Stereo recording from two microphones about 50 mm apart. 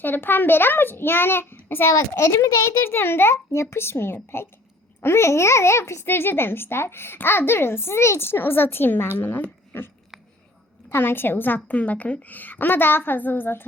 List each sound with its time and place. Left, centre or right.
0.0 s speech: left
1.9 s a child's voice: left
2.8 s speech: left
3.3 s a child's voice: left